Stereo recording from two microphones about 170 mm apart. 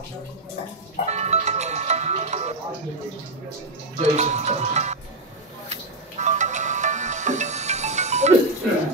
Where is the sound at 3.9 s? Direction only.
40° right (ahead or behind).